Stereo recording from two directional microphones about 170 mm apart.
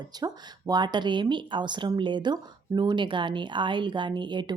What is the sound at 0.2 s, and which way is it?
Speech, 25° right (ahead or behind).